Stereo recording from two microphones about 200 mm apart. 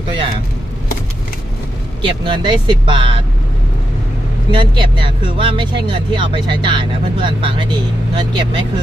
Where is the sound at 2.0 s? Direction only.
25° right (ahead or behind).